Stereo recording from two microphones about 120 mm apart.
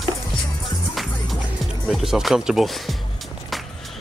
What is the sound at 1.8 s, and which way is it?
Speech, 5° right (ahead or behind).